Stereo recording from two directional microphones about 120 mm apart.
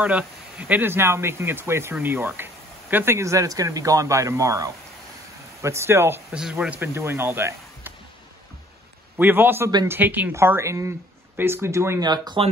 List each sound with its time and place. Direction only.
0.0 s speech: 10° right (ahead or behind)
6.3 s speech: 5° right (ahead or behind)
9.2 s speech: 15° right (ahead or behind)
12.0 s speech: 35° right (ahead or behind)